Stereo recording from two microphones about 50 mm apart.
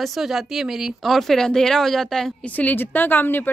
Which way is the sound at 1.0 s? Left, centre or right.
Centre.